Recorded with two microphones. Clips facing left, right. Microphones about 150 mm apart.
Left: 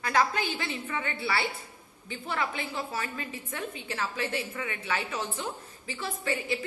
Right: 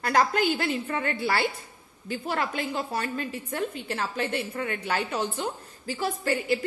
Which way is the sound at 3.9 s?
55° right (ahead or behind).